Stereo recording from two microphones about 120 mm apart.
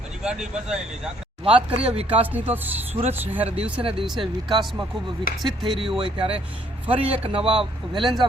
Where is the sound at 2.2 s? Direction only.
15° right (ahead or behind).